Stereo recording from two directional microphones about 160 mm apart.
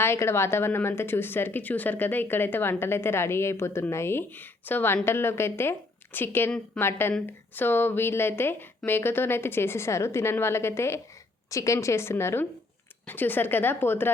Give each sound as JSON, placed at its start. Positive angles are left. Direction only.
{"t": 0.0, "sound": "a woman's voice", "side_deg": 15}